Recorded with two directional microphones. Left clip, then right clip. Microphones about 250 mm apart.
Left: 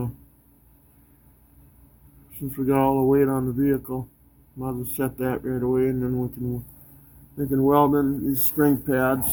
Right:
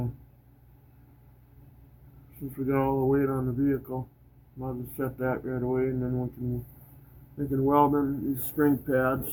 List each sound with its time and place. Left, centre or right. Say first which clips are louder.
2.6 s speech: left 6 dB; left
7.3 s speech: left 4 dB; left